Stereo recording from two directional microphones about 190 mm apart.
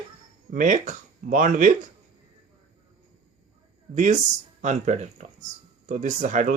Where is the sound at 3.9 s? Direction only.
40° right (ahead or behind).